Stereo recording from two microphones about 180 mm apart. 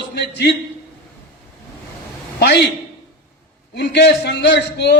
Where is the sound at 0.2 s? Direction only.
65° left (ahead or behind).